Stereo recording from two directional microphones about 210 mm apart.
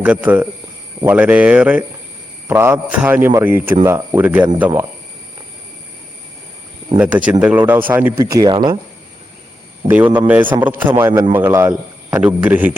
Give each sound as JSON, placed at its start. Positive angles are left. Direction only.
{"t": 0.0, "sound": "speech", "side_deg": -5}
{"t": 7.0, "sound": "speech", "side_deg": -5}
{"t": 10.2, "sound": "speech", "side_deg": -10}